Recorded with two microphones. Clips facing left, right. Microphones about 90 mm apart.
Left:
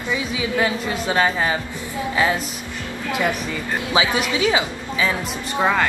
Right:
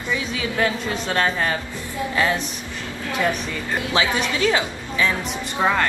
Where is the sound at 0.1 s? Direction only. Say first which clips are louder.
Left 2 dB; 10° left (ahead or behind).